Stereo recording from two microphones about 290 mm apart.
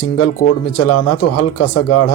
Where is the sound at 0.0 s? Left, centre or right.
Left.